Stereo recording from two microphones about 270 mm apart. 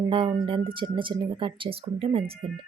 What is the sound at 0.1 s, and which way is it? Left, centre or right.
Speech, centre.